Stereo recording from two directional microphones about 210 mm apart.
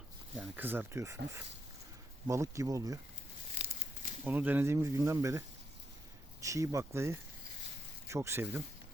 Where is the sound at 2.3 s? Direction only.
15° right (ahead or behind).